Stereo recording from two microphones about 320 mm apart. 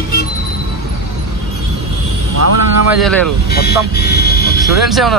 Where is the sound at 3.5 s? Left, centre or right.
Left.